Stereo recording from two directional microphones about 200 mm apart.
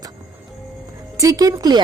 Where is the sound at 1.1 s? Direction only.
15° right (ahead or behind).